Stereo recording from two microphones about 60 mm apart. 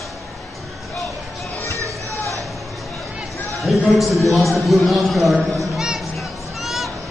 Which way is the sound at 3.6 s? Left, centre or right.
Centre.